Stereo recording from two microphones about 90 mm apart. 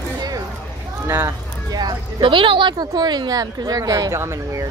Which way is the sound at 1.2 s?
45° right (ahead or behind).